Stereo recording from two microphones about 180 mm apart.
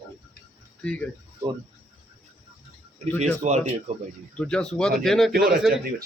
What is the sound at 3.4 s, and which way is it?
Speech, 40° right (ahead or behind).